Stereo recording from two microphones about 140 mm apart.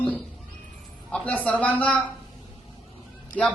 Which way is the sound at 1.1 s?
10° left (ahead or behind).